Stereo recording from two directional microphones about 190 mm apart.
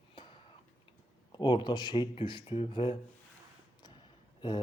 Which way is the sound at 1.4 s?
25° left (ahead or behind).